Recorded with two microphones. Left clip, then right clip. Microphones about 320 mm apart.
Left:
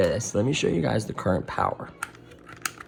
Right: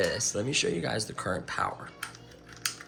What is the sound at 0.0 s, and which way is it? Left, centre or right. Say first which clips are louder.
Speech: left 5 dB; centre.